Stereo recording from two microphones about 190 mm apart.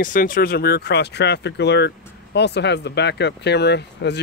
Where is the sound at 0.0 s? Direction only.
45° left (ahead or behind).